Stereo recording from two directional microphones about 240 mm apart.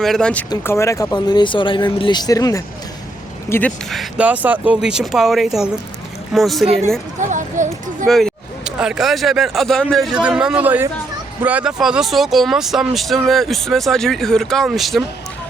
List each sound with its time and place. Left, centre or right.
0.0 s speech: centre
3.5 s speech: centre
7.2 s a sound: right
8.0 s speech: centre